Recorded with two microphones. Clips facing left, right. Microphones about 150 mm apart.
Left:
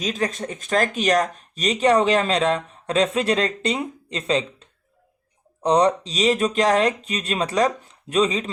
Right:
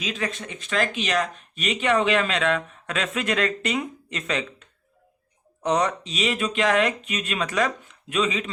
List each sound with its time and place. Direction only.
0.0 s speech: 40° left (ahead or behind)